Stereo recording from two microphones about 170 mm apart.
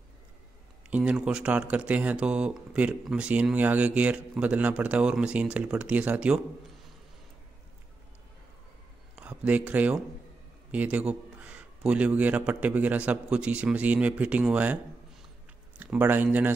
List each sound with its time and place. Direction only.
0.8 s speech: 5° right (ahead or behind)
9.1 s speech: 5° right (ahead or behind)
15.8 s speech: 10° right (ahead or behind)